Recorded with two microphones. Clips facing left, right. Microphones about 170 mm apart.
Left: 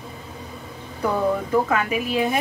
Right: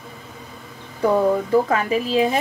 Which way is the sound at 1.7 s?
35° right (ahead or behind).